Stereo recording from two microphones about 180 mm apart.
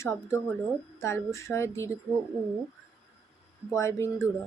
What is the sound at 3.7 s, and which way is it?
Speech, 15° left (ahead or behind).